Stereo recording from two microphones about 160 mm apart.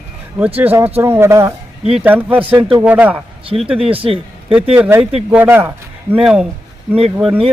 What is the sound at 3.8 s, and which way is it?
Speech, 35° right (ahead or behind).